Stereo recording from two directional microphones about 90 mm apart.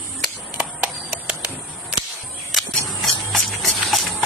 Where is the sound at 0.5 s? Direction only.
10° right (ahead or behind).